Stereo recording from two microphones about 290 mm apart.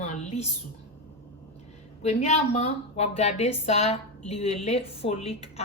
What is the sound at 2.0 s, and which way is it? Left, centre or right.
A woman's voice, left.